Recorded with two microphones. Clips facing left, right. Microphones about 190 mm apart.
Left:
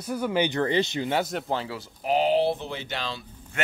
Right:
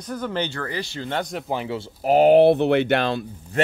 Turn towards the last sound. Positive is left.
turn(degrees=-35)  # may be behind; listen again after turning